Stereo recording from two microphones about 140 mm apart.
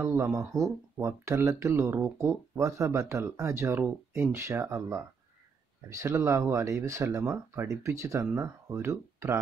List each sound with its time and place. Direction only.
0.0 s speech: 20° right (ahead or behind)